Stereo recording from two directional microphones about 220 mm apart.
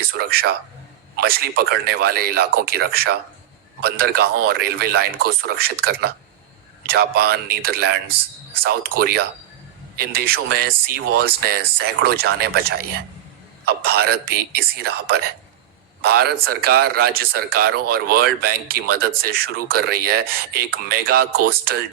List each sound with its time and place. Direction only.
0.1 s a man's voice: 45° right (ahead or behind)